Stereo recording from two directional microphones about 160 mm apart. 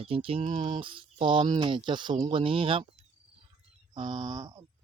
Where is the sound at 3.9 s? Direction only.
25° right (ahead or behind).